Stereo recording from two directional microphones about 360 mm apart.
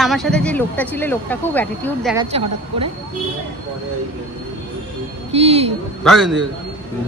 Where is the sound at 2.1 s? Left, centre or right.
Centre.